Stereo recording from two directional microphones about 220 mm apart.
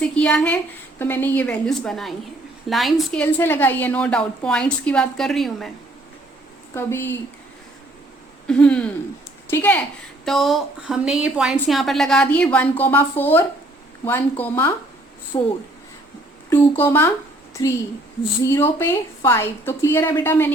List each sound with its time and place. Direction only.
0.0 s a woman's voice: 5° left (ahead or behind)
6.7 s a woman's voice: 10° left (ahead or behind)
8.4 s a woman's voice: 5° left (ahead or behind)